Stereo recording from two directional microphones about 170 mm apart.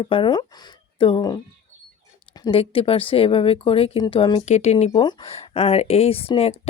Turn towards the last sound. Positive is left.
turn(degrees=35)  # may be behind; listen again after turning